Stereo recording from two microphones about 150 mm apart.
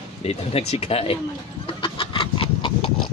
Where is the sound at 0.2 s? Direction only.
40° left (ahead or behind).